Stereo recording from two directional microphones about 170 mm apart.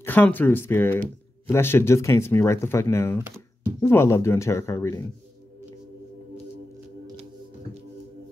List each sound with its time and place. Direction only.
0.0 s speech: 10° left (ahead or behind)